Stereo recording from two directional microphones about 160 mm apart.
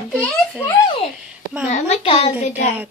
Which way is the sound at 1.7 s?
45° left (ahead or behind).